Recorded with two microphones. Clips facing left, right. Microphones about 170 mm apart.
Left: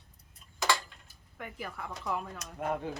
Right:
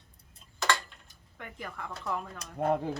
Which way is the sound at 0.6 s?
5° left (ahead or behind).